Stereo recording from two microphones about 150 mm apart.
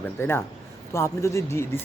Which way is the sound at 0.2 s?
15° left (ahead or behind).